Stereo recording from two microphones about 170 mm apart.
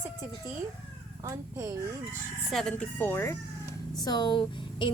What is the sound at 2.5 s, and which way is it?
Speech, 5° left (ahead or behind).